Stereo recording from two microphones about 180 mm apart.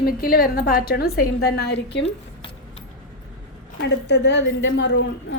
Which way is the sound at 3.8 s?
70° left (ahead or behind).